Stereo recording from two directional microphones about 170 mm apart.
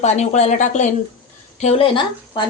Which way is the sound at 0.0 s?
40° left (ahead or behind).